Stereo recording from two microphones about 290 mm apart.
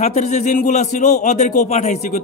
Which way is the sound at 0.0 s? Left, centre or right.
Left.